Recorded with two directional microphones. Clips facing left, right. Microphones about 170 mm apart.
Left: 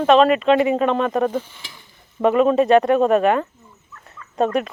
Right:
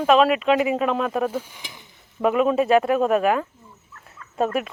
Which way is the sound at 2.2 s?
5° right (ahead or behind).